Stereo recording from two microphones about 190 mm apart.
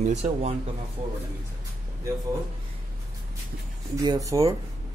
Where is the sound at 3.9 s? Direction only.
20° right (ahead or behind).